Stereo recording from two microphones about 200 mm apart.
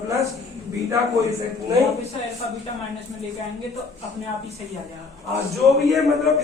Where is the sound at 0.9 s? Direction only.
15° right (ahead or behind).